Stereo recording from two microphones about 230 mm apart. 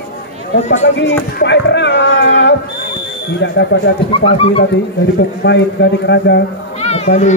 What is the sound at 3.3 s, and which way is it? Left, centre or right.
Speech, left.